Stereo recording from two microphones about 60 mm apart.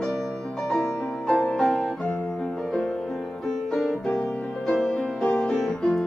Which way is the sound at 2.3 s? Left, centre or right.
Centre.